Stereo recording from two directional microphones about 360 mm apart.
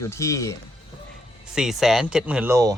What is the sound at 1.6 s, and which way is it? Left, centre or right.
Speech, centre.